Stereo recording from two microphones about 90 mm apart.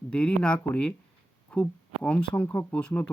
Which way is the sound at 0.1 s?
10° left (ahead or behind).